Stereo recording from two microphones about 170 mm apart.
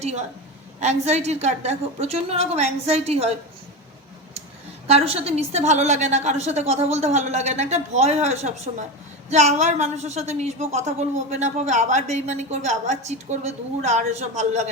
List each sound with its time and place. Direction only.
0.0 s a woman's voice: 40° right (ahead or behind)
4.9 s a woman's voice: 35° right (ahead or behind)